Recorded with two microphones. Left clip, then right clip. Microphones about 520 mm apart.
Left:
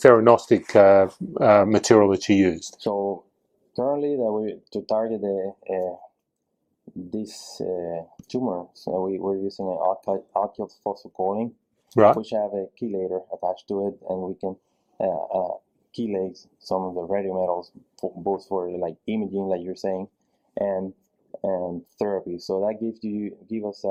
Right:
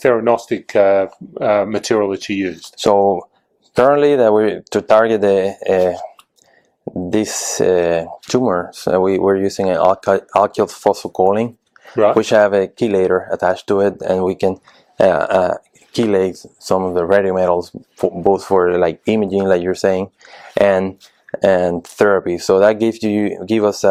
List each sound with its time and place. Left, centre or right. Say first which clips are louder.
0.0 s speech: even; left
2.8 s speech: right 13 dB; right
7.1 s speech: right 16 dB; right